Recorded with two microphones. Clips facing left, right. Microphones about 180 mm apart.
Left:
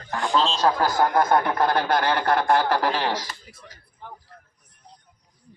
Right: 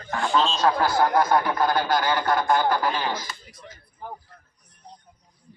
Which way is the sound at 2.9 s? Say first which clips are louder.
Left 2 dB; 80° left.